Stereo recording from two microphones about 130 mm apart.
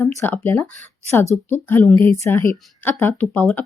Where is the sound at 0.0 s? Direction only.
15° left (ahead or behind).